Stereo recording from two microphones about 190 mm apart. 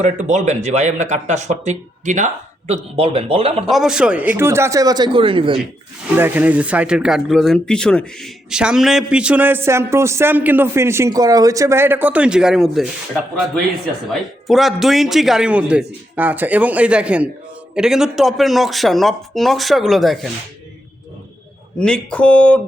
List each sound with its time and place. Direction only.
0.0 s speech: 40° right (ahead or behind)
3.7 s speech: centre (ahead or behind); by 5.5 s 25° right (ahead or behind)
6.1 s speech: 10° right (ahead or behind)
14.1 s a man's voice: centre (ahead or behind)
21.8 s a man's voice: 5° left (ahead or behind)